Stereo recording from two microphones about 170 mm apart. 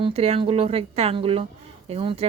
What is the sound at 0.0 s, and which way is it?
A woman's voice, 35° right (ahead or behind).